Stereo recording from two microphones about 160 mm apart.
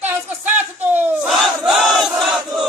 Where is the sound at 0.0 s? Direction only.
10° right (ahead or behind).